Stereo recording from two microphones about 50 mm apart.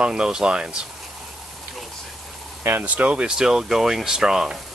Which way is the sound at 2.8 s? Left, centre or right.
Right.